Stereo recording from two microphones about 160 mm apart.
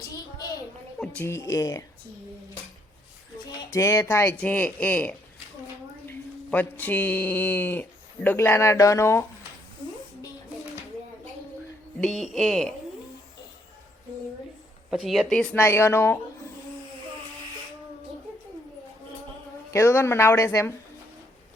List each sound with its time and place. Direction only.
0.9 s speech: 5° left (ahead or behind)
1.2 s speech: 20° left (ahead or behind)
3.5 s a man's voice: 20° left (ahead or behind)
11.9 s speech: centre (ahead or behind)
14.8 s speech: 5° right (ahead or behind)
15.5 s speech: 15° left (ahead or behind)
19.7 s speech: 15° left (ahead or behind)